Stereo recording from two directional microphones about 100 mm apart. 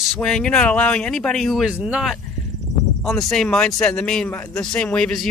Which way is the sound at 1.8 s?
10° right (ahead or behind).